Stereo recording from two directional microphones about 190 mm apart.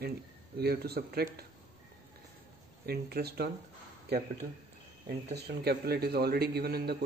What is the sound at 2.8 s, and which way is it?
Speech, 55° right (ahead or behind).